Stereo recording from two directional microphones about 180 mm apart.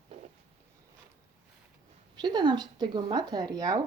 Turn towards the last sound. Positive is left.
turn(degrees=-20)  # may be behind; listen again after turning